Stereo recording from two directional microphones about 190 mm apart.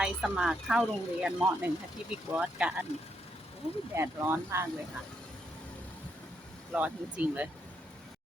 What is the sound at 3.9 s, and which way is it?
Speech, 15° right (ahead or behind).